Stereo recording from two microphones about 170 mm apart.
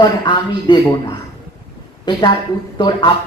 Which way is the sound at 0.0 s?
25° left (ahead or behind).